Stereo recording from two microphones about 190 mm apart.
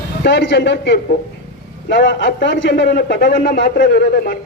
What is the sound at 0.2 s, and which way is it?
A man's voice, 65° left (ahead or behind).